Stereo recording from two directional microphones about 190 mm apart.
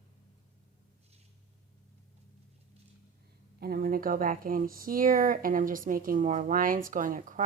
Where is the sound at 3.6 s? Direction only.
55° right (ahead or behind).